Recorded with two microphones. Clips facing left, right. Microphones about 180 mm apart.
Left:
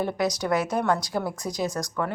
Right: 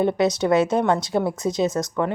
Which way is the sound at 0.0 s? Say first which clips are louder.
Right 6 dB; 25° right (ahead or behind).